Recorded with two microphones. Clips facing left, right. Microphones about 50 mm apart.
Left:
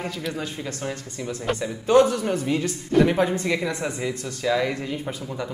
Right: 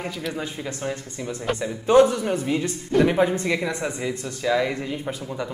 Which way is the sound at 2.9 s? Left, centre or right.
Centre.